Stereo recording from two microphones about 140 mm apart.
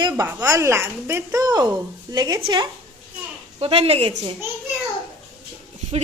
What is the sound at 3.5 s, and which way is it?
Speech, 40° right (ahead or behind).